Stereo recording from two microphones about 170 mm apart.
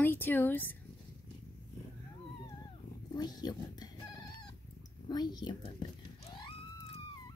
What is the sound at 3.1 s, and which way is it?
Speech, 25° left (ahead or behind).